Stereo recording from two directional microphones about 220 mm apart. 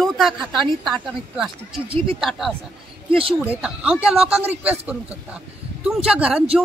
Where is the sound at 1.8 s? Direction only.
25° right (ahead or behind).